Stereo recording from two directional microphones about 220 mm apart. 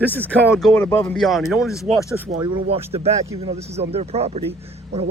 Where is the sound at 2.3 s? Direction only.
25° right (ahead or behind).